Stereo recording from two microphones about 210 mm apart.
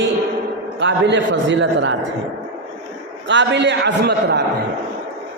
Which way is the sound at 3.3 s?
60° right (ahead or behind).